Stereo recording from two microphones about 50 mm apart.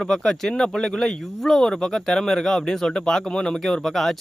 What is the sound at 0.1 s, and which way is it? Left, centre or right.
Speech, centre.